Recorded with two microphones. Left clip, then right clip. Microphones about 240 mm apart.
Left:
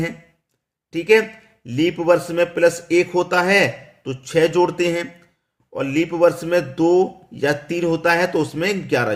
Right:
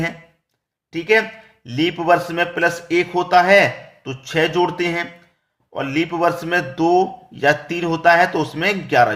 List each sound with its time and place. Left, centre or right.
0.9 s a man's voice: centre